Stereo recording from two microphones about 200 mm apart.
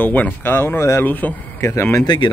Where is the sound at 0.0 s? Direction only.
10° left (ahead or behind).